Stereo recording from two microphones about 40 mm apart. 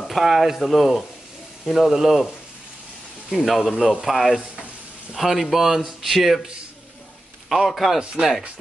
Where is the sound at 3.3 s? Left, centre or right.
Centre.